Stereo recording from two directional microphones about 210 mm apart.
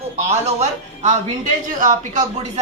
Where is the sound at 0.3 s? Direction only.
30° right (ahead or behind).